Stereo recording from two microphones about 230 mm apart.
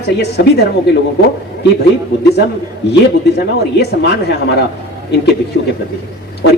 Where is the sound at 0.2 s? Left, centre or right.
Left.